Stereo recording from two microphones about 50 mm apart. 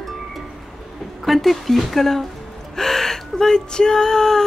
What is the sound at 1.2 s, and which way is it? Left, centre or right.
Speech, centre.